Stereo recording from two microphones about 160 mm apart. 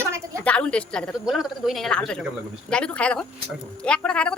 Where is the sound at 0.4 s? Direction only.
5° left (ahead or behind).